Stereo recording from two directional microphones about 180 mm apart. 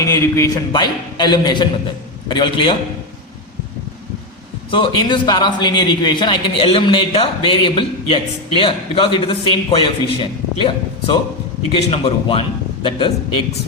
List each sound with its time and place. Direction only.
0.0 s a man's voice: 15° left (ahead or behind)
4.7 s a man's voice: 25° left (ahead or behind)